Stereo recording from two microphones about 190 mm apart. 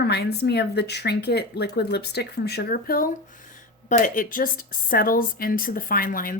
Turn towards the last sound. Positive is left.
turn(degrees=50)  # may be behind; listen again after turning